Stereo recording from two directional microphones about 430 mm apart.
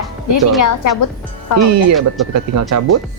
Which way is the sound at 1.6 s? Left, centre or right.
Right.